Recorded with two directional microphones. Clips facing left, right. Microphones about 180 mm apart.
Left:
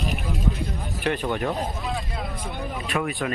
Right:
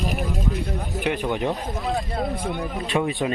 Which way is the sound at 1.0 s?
15° right (ahead or behind).